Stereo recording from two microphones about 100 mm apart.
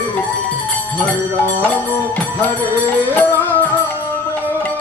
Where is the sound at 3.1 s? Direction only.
20° left (ahead or behind).